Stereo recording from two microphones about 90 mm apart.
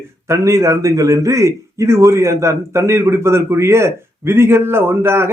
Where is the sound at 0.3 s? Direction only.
35° right (ahead or behind).